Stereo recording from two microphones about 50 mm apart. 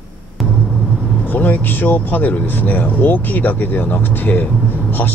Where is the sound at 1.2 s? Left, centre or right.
Left.